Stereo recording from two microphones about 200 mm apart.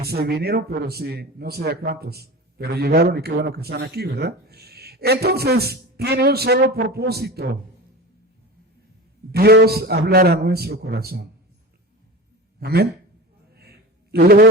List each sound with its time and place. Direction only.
0.0 s a man's voice: 50° right (ahead or behind)
9.3 s a man's voice: 50° right (ahead or behind)
12.5 s a man's voice: 50° right (ahead or behind)
13.5 s a sound: 50° right (ahead or behind)